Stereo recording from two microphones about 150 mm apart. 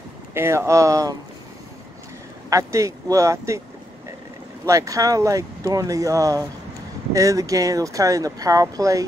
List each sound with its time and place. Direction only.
0.3 s speech: 15° right (ahead or behind)
2.5 s speech: 20° right (ahead or behind)
4.6 s speech: 20° right (ahead or behind)